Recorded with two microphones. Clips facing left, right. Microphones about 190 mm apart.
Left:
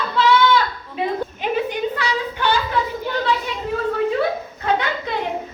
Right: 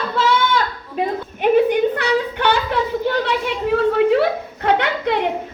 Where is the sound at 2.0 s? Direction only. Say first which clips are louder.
Right 4 dB; 65° right (ahead or behind).